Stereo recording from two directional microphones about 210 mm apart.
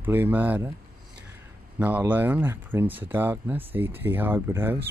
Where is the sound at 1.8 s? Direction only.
10° right (ahead or behind).